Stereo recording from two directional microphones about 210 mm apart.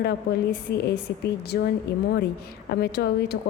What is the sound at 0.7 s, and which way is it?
Speech, 50° left (ahead or behind).